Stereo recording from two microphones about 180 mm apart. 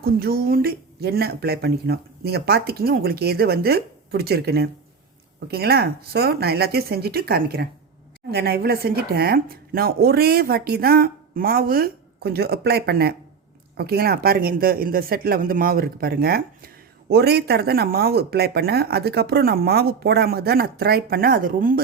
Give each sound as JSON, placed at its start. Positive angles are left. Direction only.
{"t": 0.0, "sound": "speech", "side_deg": -55}